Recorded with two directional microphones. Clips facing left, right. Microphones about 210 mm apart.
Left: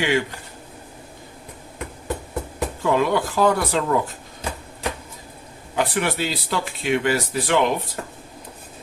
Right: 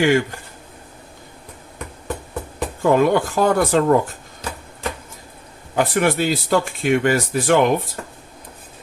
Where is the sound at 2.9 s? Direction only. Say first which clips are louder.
Right 4 dB; 50° right (ahead or behind).